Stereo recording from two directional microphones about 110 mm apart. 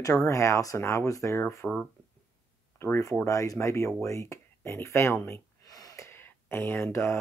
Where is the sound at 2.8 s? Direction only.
25° left (ahead or behind).